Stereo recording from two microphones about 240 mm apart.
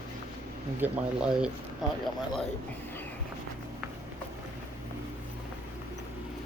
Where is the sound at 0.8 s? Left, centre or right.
Centre.